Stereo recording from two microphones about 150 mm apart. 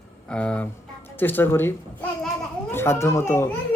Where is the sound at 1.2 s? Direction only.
15° left (ahead or behind).